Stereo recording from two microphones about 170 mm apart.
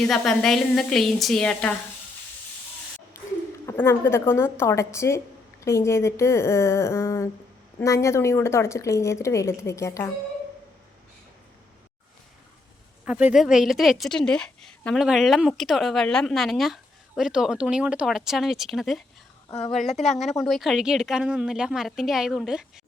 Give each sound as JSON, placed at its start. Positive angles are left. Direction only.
{"t": 0.1, "sound": "a woman's voice", "side_deg": 0}
{"t": 3.7, "sound": "speech", "side_deg": 15}
{"t": 13.1, "sound": "a woman's voice", "side_deg": -5}
{"t": 19.5, "sound": "a woman's voice", "side_deg": 40}
{"t": 20.1, "sound": "a woman's voice", "side_deg": 0}